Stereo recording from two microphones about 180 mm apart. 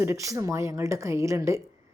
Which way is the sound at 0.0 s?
15° right (ahead or behind).